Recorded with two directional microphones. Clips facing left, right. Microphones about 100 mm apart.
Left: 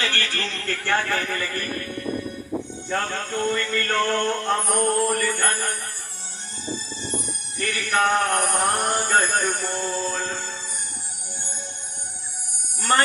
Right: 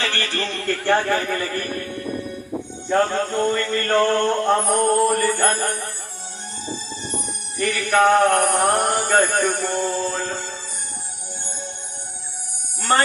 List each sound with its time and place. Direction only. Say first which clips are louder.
0.0 s a man's voice: right 2 dB; 25° right (ahead or behind)
2.9 s a man's voice: right 7 dB; 25° right (ahead or behind)
7.7 s a man's voice: right 5 dB; 30° right (ahead or behind)
9.8 s a man's voice: right 3 dB; 25° right (ahead or behind)